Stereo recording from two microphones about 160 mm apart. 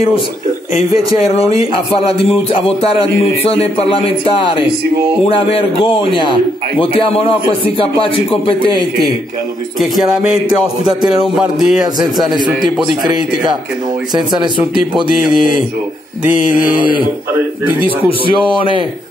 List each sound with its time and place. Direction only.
1.3 s speech: 40° left (ahead or behind)
9.8 s music: centre (ahead or behind)
11.8 s speech: 25° right (ahead or behind)
14.1 s speech: 25° right (ahead or behind)
16.7 s speech: 30° right (ahead or behind)
17.3 s a man's voice: 10° right (ahead or behind)